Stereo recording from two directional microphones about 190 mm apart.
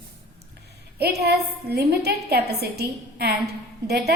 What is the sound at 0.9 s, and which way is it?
A woman's voice, 55° right (ahead or behind).